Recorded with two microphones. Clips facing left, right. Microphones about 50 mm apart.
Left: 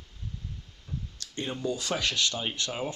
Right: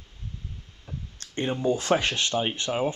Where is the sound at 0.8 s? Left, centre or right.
Right.